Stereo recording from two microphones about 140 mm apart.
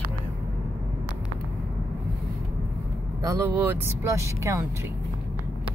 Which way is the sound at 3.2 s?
25° right (ahead or behind).